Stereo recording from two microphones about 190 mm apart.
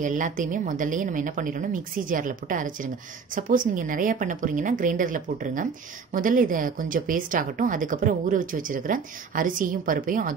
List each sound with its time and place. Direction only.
0.0 s a woman's voice: 40° right (ahead or behind)